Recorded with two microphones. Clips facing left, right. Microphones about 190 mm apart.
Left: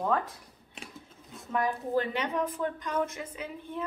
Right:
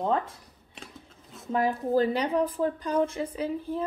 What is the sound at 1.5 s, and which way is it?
A woman's voice, 30° right (ahead or behind).